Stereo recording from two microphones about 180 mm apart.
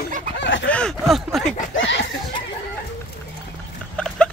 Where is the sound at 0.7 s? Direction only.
5° left (ahead or behind).